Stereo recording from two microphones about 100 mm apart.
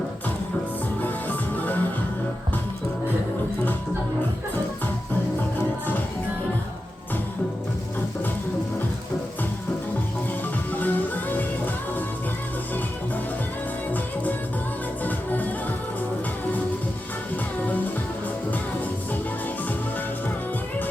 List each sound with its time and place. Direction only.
1.0 s music: 15° left (ahead or behind)
10.7 s music: 20° left (ahead or behind)
15.0 s music: 15° left (ahead or behind)